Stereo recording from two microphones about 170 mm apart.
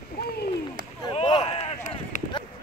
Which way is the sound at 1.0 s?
30° left (ahead or behind).